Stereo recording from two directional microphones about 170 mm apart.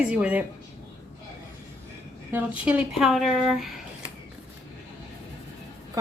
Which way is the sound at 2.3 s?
10° right (ahead or behind).